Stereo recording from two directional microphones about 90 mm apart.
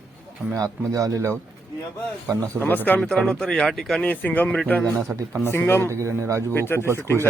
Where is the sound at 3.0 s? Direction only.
10° left (ahead or behind).